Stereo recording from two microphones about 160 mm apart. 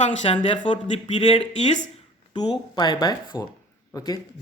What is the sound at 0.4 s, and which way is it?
Speech, 35° left (ahead or behind).